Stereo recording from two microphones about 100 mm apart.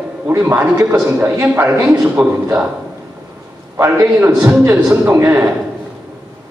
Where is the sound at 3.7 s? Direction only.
25° right (ahead or behind).